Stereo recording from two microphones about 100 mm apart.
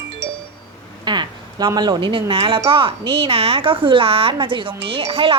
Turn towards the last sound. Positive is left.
turn(degrees=-60)  # may be behind; listen again after turning